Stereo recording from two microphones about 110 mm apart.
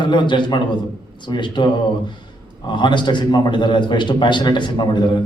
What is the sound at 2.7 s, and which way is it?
A man's voice, 45° left (ahead or behind).